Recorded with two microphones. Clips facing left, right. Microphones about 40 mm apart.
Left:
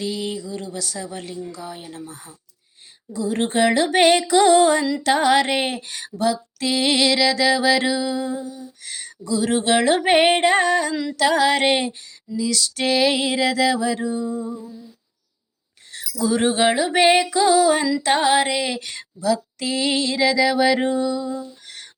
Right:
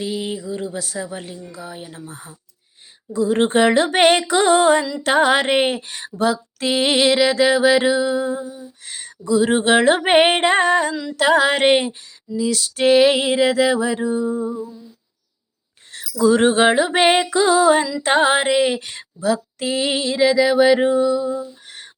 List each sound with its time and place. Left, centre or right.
0.0 s music: right
1.1 s speech: centre
3.1 s music: right
15.9 s a sound: right
16.2 s music: right
19.5 s music: right